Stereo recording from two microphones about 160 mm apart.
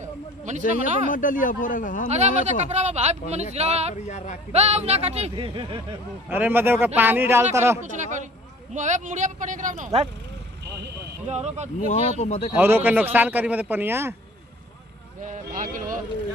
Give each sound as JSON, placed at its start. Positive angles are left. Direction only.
{"t": 0.5, "sound": "a sound", "side_deg": -50}
{"t": 1.1, "sound": "a man's voice", "side_deg": 55}
{"t": 2.0, "sound": "speech", "side_deg": -45}
{"t": 3.9, "sound": "speech", "side_deg": 50}
{"t": 4.5, "sound": "speech", "side_deg": -40}
{"t": 6.2, "sound": "a man's voice", "side_deg": -10}
{"t": 7.8, "sound": "speech", "side_deg": -50}
{"t": 11.2, "sound": "speech", "side_deg": -45}
{"t": 11.8, "sound": "speech", "side_deg": 45}
{"t": 12.5, "sound": "a man's voice", "side_deg": -10}
{"t": 15.2, "sound": "a sound", "side_deg": -50}